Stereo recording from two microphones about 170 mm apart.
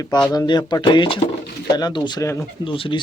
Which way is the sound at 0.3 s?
25° left (ahead or behind).